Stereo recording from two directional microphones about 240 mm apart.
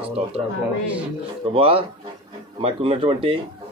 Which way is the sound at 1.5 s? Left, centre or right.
Right.